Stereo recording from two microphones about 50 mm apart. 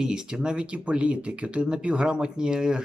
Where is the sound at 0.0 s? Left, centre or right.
Centre.